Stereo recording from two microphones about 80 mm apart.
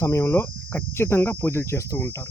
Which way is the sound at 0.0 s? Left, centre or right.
Left.